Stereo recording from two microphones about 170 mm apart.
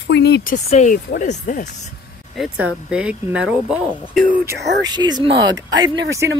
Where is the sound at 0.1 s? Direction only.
75° left (ahead or behind).